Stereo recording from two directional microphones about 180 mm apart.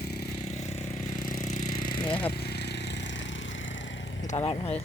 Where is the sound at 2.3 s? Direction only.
65° left (ahead or behind); by 4.1 s 90° left.